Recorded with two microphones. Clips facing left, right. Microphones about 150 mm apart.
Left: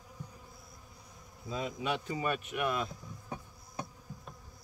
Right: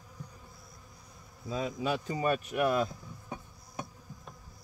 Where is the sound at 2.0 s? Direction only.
35° right (ahead or behind).